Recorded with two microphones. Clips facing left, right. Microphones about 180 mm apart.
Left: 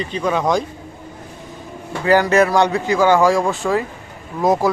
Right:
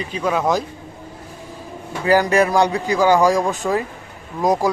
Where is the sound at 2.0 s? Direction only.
15° right (ahead or behind).